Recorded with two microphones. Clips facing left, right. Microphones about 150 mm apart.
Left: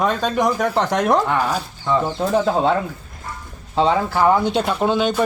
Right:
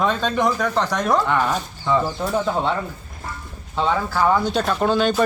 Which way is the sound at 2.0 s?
25° left (ahead or behind).